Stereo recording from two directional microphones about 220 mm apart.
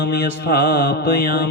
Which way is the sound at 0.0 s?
45° left (ahead or behind).